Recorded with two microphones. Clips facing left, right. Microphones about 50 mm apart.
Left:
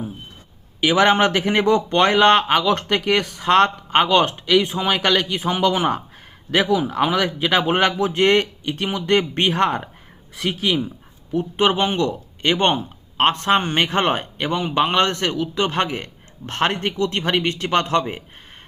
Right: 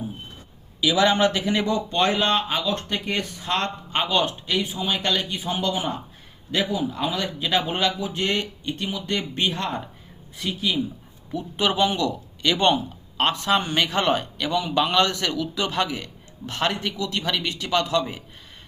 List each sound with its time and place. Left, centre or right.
0.8 s a man's voice: left
11.3 s speech: left